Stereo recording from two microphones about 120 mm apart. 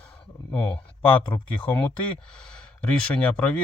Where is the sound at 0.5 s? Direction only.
10° left (ahead or behind).